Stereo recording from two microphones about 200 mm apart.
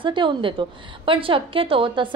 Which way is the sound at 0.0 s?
25° right (ahead or behind).